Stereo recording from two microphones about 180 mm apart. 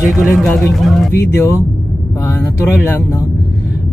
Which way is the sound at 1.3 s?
15° left (ahead or behind).